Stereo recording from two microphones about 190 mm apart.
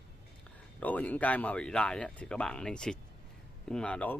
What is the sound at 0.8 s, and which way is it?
A man's voice, 10° left (ahead or behind).